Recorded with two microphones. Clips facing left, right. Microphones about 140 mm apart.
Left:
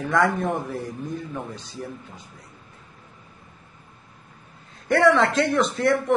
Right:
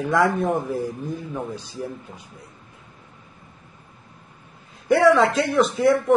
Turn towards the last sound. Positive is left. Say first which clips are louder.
# right 3 dB
turn(degrees=0)  # may be behind; listen again after turning